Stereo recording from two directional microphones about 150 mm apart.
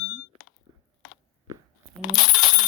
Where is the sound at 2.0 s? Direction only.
Centre (ahead or behind).